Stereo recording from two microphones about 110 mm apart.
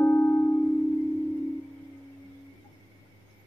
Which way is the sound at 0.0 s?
25° left (ahead or behind).